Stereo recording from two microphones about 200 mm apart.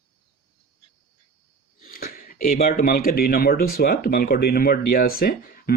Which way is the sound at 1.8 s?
45° left (ahead or behind).